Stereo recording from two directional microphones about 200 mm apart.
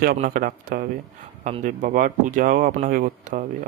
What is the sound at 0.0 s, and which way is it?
Speech, 45° right (ahead or behind).